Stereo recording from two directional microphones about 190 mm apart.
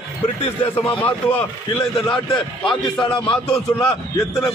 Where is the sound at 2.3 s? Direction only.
25° left (ahead or behind).